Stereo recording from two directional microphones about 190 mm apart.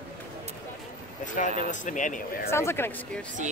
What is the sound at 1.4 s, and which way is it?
Speech, 45° left (ahead or behind).